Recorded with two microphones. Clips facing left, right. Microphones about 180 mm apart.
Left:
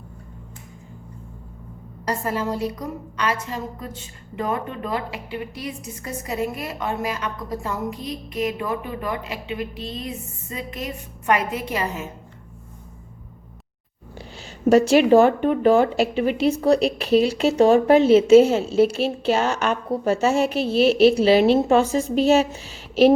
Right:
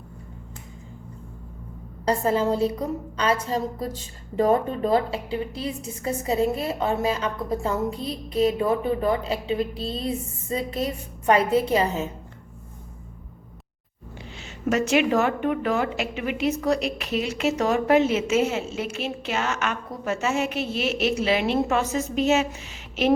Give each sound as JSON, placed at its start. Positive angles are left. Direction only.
{"t": 2.0, "sound": "a woman's voice", "side_deg": -25}
{"t": 14.2, "sound": "speech", "side_deg": 35}